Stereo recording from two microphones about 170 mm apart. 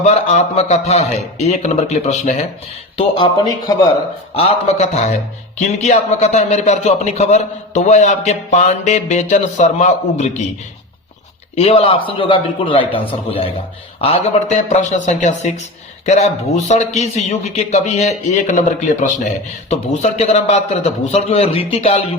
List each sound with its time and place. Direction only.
0.0 s a man's voice: 40° left (ahead or behind)
3.2 s speech: 25° left (ahead or behind)
4.4 s a man's voice: 35° left (ahead or behind)
11.5 s a man's voice: 35° left (ahead or behind)